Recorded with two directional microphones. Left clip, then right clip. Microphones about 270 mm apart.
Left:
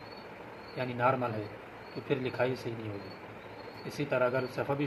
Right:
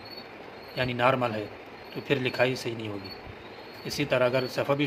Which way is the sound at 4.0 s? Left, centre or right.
Centre.